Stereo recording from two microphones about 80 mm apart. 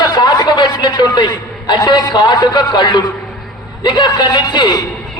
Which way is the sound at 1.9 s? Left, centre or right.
Left.